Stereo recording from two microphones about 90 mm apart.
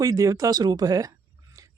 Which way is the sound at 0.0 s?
40° right (ahead or behind).